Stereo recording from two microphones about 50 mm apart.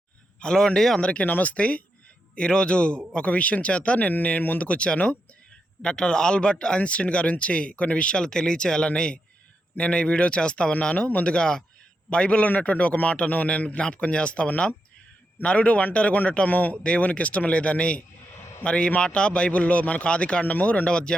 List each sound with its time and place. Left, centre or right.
0.3 s a man's voice: centre
0.9 s speech: left
12.5 s speech: left
20.8 s speech: centre